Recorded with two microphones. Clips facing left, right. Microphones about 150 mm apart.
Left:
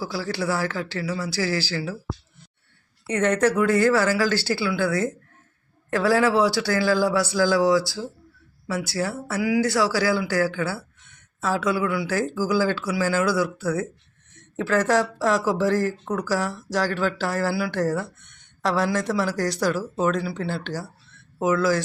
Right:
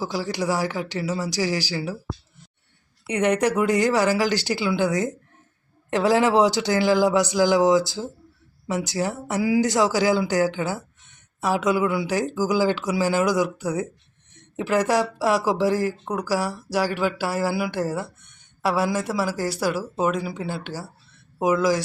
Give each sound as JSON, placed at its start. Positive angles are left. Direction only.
{"t": 0.0, "sound": "speech", "side_deg": -20}
{"t": 3.1, "sound": "speech", "side_deg": -15}